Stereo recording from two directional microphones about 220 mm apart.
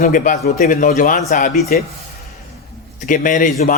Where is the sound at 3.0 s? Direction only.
35° left (ahead or behind).